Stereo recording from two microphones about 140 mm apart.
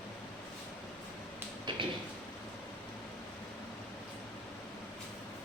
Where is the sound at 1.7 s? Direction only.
35° right (ahead or behind).